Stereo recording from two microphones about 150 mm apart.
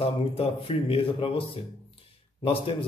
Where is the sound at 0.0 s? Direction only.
40° left (ahead or behind).